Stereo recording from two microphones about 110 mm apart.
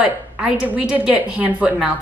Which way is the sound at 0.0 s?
10° right (ahead or behind).